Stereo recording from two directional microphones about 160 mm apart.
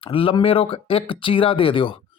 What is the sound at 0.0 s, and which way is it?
Speech, 35° left (ahead or behind).